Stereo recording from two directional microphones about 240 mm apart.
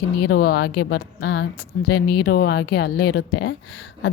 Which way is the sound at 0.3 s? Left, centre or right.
Left.